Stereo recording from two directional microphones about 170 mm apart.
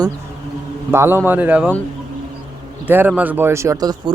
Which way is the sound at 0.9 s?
15° right (ahead or behind).